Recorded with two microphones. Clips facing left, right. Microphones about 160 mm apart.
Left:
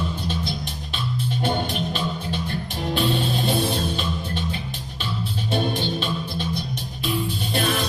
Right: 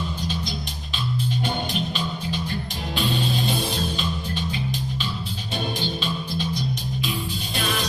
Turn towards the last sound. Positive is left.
turn(degrees=55)  # may be behind; listen again after turning